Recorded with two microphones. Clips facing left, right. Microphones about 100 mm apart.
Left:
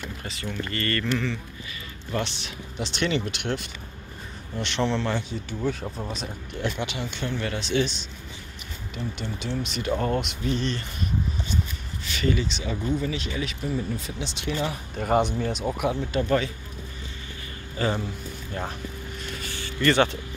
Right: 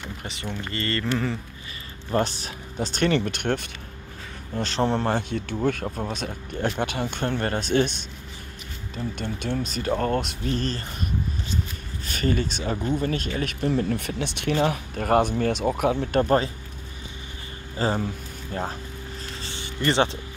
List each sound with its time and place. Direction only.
0.2 s speech: 25° right (ahead or behind)
1.1 s speech: 35° right (ahead or behind)
4.6 s speech: 40° right (ahead or behind)
5.3 s speech: 60° right (ahead or behind)
9.2 s speech: 55° right (ahead or behind)
12.1 s speech: 45° right (ahead or behind)
15.6 s speech: 35° right (ahead or behind)
15.9 s speech: 55° right (ahead or behind)
17.7 s a man's voice: 35° right (ahead or behind)
19.2 s vehicle: 25° right (ahead or behind)